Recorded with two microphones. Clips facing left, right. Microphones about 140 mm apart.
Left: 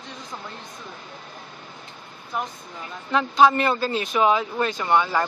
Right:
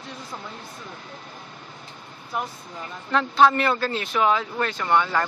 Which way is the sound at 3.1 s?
10° left (ahead or behind).